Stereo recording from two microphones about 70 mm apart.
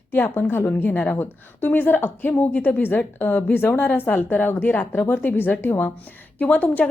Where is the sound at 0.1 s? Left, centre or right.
Left.